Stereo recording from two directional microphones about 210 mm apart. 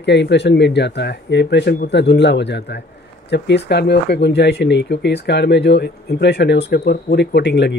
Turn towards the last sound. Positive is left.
turn(degrees=55)  # may be behind; listen again after turning